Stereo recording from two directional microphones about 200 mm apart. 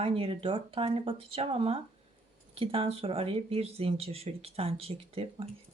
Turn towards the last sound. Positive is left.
turn(degrees=-30)  # may be behind; listen again after turning